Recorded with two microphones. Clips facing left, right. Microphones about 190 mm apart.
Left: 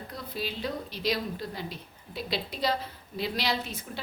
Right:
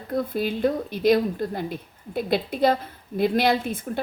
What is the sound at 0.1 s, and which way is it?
A woman's voice, 50° right (ahead or behind).